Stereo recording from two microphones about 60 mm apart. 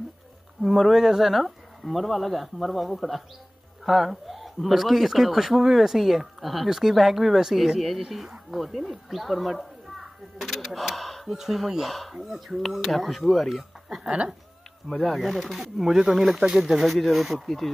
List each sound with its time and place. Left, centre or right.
0.6 s speech: centre
14.0 s speech: centre
15.0 s speech: centre